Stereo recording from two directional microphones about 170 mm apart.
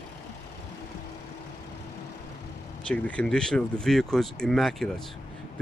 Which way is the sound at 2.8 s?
5° left (ahead or behind).